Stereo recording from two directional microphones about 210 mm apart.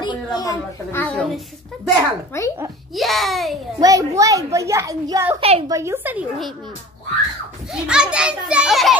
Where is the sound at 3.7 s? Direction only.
15° right (ahead or behind).